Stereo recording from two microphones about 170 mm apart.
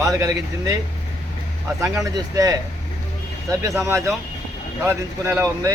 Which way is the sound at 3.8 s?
15° right (ahead or behind).